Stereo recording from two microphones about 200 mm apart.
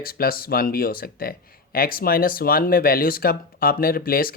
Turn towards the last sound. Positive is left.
turn(degrees=45)  # may be behind; listen again after turning